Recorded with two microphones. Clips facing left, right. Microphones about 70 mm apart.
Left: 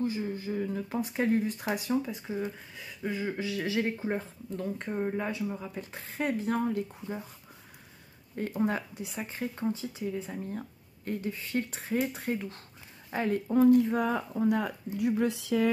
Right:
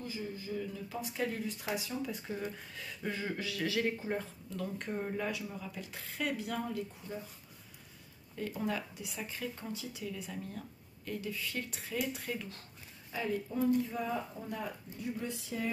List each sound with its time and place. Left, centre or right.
0.0 s speech: left
2.0 s speech: centre
3.3 s speech: left
8.4 s speech: left
13.1 s speech: left